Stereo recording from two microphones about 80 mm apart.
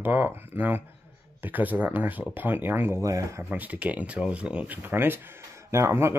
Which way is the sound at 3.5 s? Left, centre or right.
Centre.